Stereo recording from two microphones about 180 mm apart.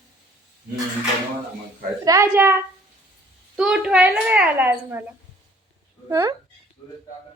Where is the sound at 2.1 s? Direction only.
15° right (ahead or behind).